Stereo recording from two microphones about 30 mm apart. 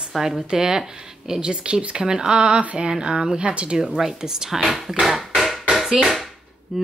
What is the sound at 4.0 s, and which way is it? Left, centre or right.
Speech, centre.